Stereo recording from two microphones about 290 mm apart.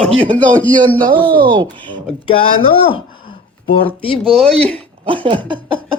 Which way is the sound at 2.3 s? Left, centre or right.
Centre.